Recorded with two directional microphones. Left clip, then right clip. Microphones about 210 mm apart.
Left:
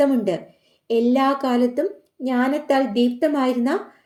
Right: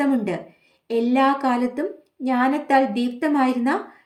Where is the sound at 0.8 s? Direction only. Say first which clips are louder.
Left 1 dB; 40° left (ahead or behind).